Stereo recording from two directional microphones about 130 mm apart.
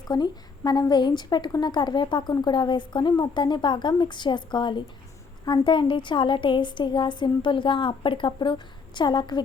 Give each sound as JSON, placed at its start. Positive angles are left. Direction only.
{"t": 0.1, "sound": "a woman's voice", "side_deg": 30}